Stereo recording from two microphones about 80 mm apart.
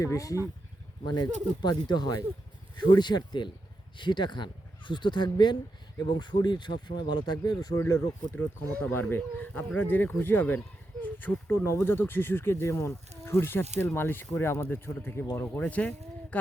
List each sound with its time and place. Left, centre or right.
0.0 s speech: left
1.0 s speech: left
7.8 s speech: left
8.4 s speech: left
15.6 s speech: centre